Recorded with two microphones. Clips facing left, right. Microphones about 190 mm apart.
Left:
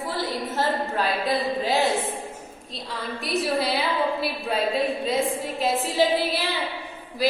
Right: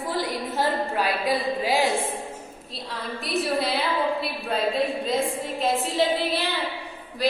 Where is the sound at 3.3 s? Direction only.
Centre (ahead or behind).